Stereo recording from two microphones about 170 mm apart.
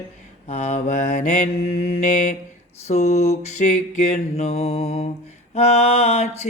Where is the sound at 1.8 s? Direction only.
55° left (ahead or behind).